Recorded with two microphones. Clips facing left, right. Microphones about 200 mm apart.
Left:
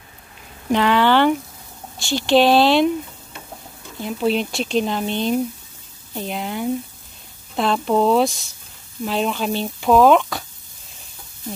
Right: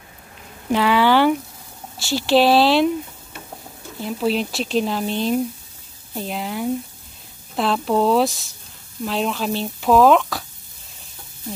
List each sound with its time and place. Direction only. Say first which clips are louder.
0.7 s speech: even; 5° right (ahead or behind)
4.0 s speech: left 1 dB; centre (ahead or behind)